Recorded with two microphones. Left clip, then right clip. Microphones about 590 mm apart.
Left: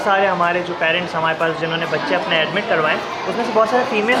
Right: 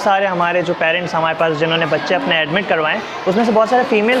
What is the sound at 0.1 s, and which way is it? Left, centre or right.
Speech, right.